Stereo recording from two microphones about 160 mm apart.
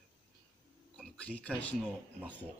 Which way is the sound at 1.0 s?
5° left (ahead or behind).